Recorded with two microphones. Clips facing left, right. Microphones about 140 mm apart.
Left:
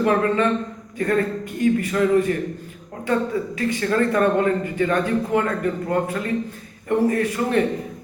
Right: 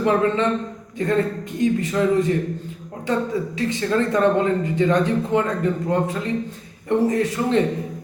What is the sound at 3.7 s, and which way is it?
A man's voice, 20° right (ahead or behind).